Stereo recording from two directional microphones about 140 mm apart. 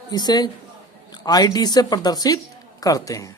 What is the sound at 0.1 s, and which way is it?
Speech, 30° left (ahead or behind).